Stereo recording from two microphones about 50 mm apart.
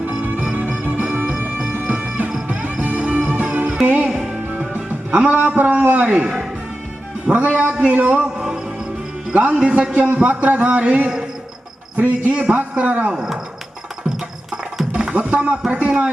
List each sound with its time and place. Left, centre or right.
0.2 s music: right
5.9 s a man's voice: right
7.3 s a man's voice: right
8.4 s music: centre
9.3 s a man's voice: right
13.1 s speech: centre
14.5 s music: centre
15.1 s a man's voice: right